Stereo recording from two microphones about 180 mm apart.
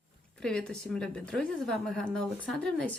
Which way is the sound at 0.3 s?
5° left (ahead or behind).